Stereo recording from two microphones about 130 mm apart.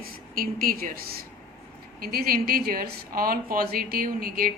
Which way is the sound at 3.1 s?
90° right.